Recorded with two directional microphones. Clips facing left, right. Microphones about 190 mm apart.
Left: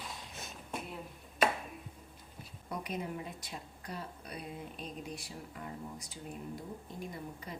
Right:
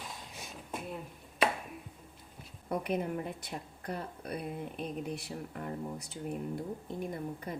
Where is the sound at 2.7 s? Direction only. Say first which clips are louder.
Right 6 dB; 55° right (ahead or behind).